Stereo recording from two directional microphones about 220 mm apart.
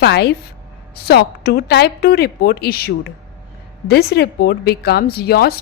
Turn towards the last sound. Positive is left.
turn(degrees=45)  # may be behind; listen again after turning